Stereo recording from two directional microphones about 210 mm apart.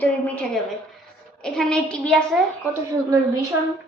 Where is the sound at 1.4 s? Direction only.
Centre (ahead or behind).